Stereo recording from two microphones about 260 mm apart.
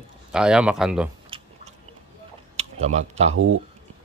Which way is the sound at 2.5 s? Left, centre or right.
Right.